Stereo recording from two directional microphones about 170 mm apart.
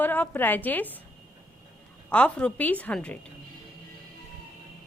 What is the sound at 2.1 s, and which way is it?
A woman's voice, 5° left (ahead or behind).